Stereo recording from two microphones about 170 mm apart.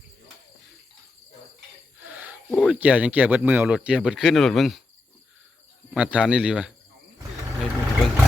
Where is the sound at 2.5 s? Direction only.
5° left (ahead or behind).